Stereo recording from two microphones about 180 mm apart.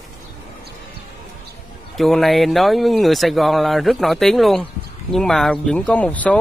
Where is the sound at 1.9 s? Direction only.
Centre (ahead or behind).